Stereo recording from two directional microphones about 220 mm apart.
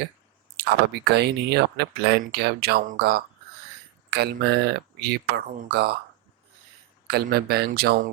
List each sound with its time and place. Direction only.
0.5 s speech: 50° right (ahead or behind)
7.1 s speech: 45° right (ahead or behind)